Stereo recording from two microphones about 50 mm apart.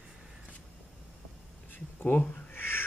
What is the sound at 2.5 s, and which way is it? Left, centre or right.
Crow, left.